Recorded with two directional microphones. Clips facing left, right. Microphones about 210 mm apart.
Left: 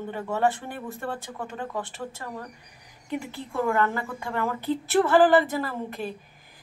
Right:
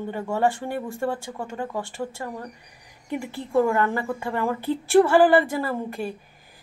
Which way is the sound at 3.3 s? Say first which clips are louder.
Right 6 dB; 15° right (ahead or behind).